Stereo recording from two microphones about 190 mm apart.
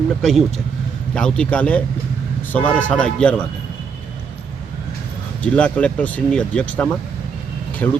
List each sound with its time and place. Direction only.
0.2 s a man's voice: centre (ahead or behind)
5.4 s speech: 5° left (ahead or behind)